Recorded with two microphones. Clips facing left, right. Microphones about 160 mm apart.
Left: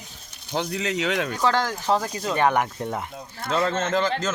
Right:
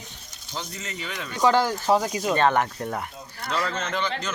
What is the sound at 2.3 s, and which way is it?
Speech, 15° left (ahead or behind).